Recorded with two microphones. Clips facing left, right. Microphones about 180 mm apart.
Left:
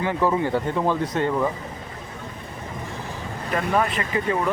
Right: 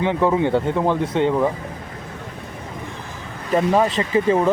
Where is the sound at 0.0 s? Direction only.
20° right (ahead or behind).